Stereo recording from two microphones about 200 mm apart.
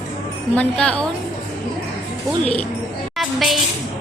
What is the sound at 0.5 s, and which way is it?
Speech, 5° left (ahead or behind).